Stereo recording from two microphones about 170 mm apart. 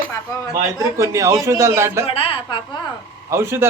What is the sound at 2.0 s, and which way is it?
Speech, 35° left (ahead or behind).